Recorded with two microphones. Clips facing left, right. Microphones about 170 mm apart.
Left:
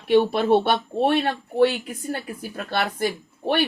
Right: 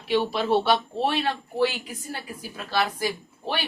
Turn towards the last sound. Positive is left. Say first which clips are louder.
# left 7 dB
turn(degrees=55)  # may be behind; listen again after turning